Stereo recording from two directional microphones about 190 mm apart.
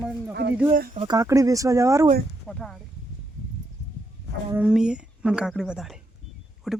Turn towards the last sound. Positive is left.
turn(degrees=0)  # may be behind; listen again after turning